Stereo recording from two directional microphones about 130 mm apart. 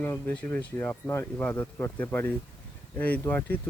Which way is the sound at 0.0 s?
15° left (ahead or behind).